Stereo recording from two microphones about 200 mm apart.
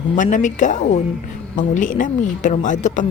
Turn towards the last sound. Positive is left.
turn(degrees=40)  # may be behind; listen again after turning